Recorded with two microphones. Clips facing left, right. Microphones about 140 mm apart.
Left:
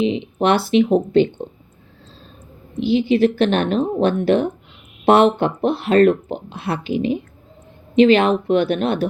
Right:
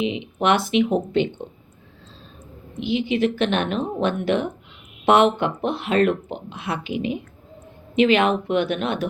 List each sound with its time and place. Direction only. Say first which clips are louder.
0.0 s speech: left 4 dB; 35° left (ahead or behind)
2.8 s speech: left 6 dB; 35° left (ahead or behind)